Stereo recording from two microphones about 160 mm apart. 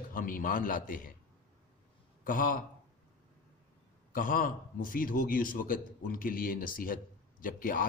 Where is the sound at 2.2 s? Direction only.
60° left (ahead or behind).